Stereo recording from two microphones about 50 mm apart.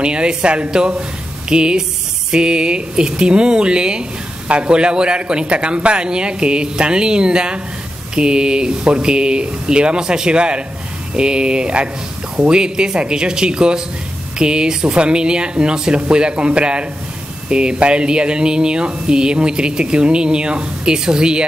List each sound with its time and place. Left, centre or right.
0.0 s speech: centre